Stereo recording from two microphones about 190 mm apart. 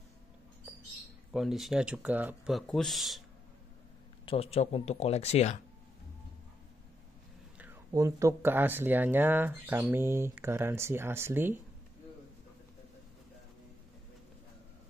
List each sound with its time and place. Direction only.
1.3 s speech: centre (ahead or behind)
4.3 s speech: 30° left (ahead or behind)
7.5 s speech: 10° right (ahead or behind)